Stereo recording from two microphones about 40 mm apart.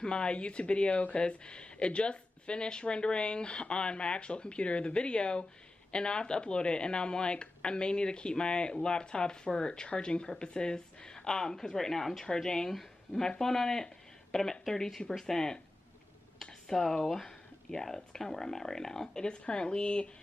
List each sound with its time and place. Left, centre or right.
0.0 s speech: left